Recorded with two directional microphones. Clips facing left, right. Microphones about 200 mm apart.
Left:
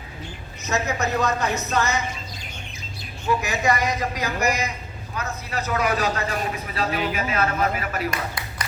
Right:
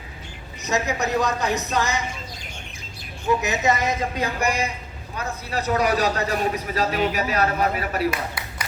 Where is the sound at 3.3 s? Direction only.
20° right (ahead or behind).